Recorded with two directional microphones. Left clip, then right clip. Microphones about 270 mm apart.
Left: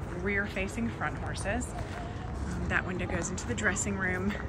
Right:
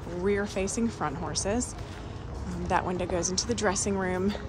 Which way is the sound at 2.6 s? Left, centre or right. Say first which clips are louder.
Right 4 dB; centre.